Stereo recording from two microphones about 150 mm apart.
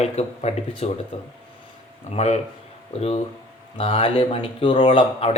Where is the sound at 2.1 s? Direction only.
50° left (ahead or behind).